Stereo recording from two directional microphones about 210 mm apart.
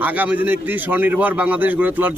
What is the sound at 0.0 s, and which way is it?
A man's voice, 10° right (ahead or behind).